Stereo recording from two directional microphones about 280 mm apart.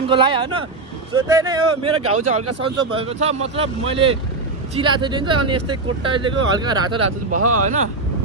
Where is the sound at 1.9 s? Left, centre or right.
Right.